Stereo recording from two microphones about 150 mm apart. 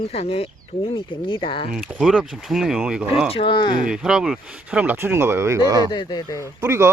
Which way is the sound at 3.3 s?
35° left (ahead or behind).